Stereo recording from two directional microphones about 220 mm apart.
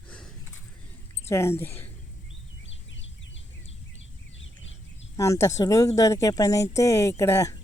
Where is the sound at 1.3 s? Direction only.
10° left (ahead or behind).